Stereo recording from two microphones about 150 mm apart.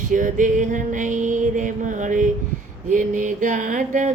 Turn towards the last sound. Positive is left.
turn(degrees=-60)  # may be behind; listen again after turning